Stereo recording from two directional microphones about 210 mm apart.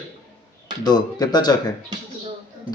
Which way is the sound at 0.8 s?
20° left (ahead or behind).